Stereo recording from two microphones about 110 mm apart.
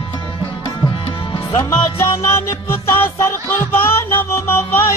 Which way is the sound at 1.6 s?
25° left (ahead or behind).